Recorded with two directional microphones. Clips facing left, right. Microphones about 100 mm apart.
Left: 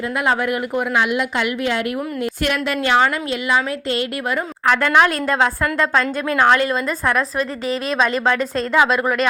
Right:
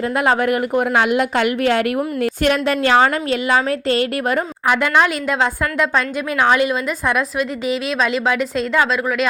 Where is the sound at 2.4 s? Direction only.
35° right (ahead or behind).